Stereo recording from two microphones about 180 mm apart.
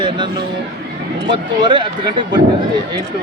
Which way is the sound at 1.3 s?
25° right (ahead or behind).